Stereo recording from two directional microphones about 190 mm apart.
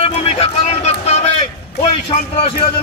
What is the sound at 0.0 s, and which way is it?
Music, 35° left (ahead or behind).